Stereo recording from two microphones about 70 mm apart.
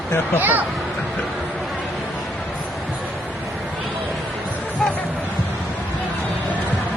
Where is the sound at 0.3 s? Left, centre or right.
Right.